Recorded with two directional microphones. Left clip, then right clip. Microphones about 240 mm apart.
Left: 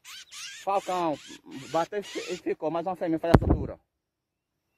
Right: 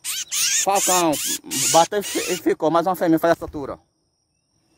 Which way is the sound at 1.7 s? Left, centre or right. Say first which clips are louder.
Right 12 dB; centre.